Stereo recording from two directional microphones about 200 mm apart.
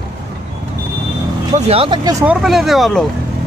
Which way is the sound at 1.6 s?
30° right (ahead or behind).